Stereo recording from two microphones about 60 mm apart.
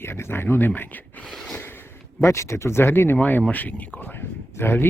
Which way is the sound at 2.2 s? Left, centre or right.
Left.